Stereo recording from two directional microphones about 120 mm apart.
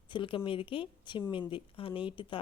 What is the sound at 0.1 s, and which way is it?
Speech, 45° left (ahead or behind).